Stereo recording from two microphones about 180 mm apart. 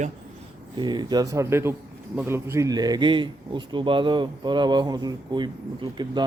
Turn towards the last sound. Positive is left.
turn(degrees=-25)  # may be behind; listen again after turning